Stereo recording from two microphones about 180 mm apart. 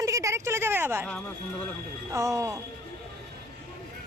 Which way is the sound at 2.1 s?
15° right (ahead or behind).